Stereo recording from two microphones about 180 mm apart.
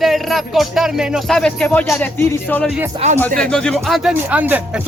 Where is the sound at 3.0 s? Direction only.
35° right (ahead or behind).